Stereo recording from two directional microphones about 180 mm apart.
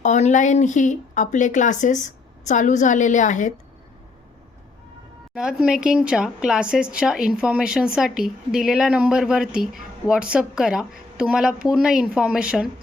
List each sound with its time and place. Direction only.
0.0 s speech: 40° left (ahead or behind)
5.3 s speech: 5° right (ahead or behind)